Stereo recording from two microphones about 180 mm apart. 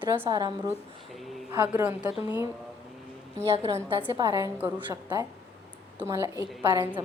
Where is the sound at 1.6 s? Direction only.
10° right (ahead or behind).